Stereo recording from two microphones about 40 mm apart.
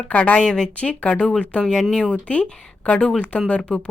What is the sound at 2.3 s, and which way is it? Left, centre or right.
Speech, left.